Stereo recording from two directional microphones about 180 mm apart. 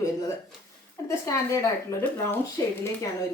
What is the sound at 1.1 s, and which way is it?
Speech, 15° left (ahead or behind).